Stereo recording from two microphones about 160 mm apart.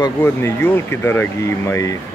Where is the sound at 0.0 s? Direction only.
15° left (ahead or behind).